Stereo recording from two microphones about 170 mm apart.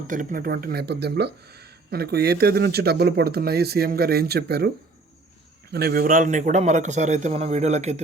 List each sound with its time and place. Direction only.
0.1 s speech: 50° right (ahead or behind); by 4.7 s 70° right (ahead or behind)
5.7 s a man's voice: 65° right (ahead or behind); by 8.0 s 40° right (ahead or behind)